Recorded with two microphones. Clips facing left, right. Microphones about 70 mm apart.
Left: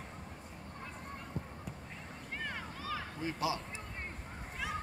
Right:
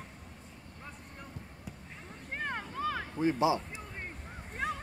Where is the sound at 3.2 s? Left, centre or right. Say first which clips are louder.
Right 9 dB; right.